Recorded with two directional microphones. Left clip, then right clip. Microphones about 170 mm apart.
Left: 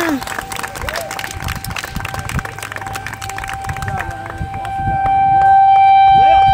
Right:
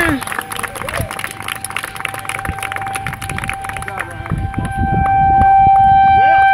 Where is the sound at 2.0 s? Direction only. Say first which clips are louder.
Right 2 dB; 60° left (ahead or behind).